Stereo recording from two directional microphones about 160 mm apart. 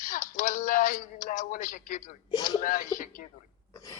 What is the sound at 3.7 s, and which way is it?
Throat clearing, 25° left (ahead or behind).